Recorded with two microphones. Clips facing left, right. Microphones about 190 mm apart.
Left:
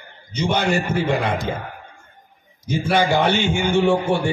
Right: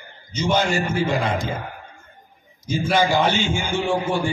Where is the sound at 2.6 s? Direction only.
60° left (ahead or behind).